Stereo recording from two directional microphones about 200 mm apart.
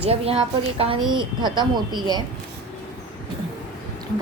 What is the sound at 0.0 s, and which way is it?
Speech, 30° right (ahead or behind).